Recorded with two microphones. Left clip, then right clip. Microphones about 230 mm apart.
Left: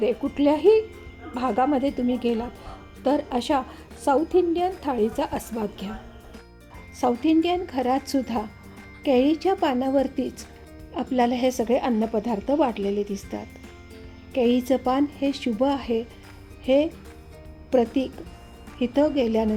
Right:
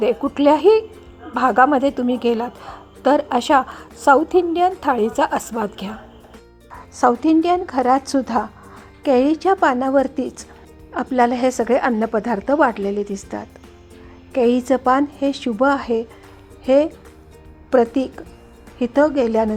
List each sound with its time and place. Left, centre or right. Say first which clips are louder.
0.2 s a woman's voice: right 7 dB; centre
6.9 s a woman's voice: right 6 dB; centre